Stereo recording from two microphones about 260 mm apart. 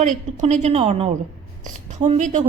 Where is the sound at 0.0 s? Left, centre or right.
Right.